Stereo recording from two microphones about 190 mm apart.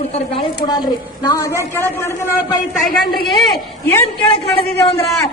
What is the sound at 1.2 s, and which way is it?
A man's voice, 15° left (ahead or behind).